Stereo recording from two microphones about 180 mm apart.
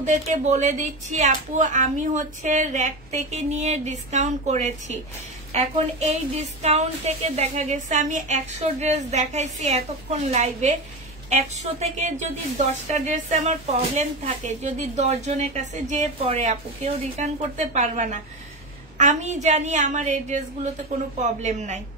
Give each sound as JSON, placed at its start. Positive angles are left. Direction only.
{"t": 0.0, "sound": "a woman's voice", "side_deg": -40}